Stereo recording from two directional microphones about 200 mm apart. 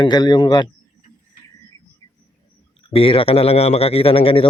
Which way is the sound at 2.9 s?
30° left (ahead or behind).